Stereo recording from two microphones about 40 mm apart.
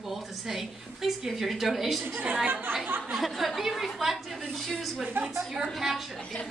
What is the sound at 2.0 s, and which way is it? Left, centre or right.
Speech, right.